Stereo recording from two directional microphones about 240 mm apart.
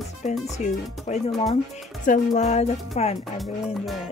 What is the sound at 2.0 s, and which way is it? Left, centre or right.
Music, left.